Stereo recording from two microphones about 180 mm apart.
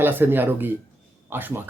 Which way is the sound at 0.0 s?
10° right (ahead or behind).